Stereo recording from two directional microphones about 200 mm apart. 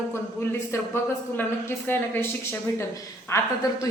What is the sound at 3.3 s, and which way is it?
Speech, 15° left (ahead or behind).